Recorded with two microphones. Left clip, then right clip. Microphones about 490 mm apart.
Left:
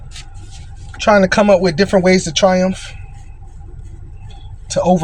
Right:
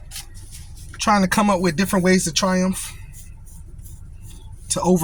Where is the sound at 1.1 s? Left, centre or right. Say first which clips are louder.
Left 10 dB; right.